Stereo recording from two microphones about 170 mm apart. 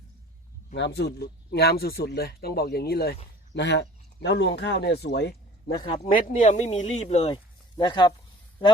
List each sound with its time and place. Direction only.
0.7 s speech: 75° left (ahead or behind)
3.5 s speech: 90° left
5.7 s speech: 30° left (ahead or behind)
6.1 s speech: 50° left (ahead or behind)
7.8 s speech: 25° left (ahead or behind)